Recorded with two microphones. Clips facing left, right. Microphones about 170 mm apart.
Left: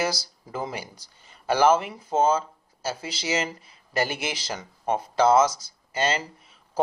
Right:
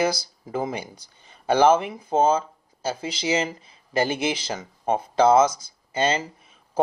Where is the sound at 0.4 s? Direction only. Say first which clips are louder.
Right 4 dB; 20° right (ahead or behind).